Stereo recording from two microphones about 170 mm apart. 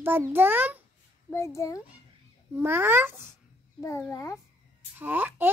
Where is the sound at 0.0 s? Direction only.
10° right (ahead or behind).